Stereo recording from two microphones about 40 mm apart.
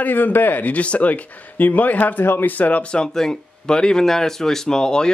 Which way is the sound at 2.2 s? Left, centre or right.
Left.